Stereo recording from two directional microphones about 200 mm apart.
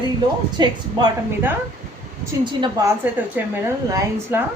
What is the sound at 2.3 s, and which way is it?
A woman's voice, 15° right (ahead or behind).